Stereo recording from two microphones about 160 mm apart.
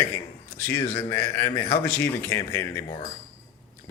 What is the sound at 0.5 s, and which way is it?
A man's voice, 15° left (ahead or behind).